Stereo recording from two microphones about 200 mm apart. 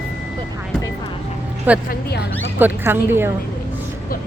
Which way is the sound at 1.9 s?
55° left (ahead or behind).